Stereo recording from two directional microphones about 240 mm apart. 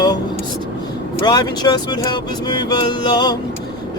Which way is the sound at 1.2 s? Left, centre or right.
Centre.